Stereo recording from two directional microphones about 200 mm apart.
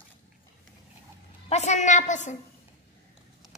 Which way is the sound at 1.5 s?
35° left (ahead or behind).